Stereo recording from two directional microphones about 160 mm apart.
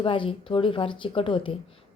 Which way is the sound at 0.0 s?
30° left (ahead or behind).